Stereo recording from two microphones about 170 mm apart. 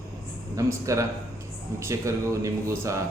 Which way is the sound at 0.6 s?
20° right (ahead or behind).